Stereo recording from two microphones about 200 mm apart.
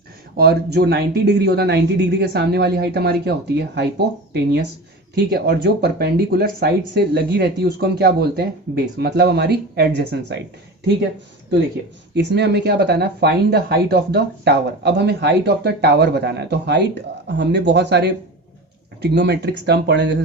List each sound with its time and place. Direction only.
0.3 s speech: 55° right (ahead or behind)
12.1 s speech: 60° right (ahead or behind)
19.1 s speech: 55° right (ahead or behind)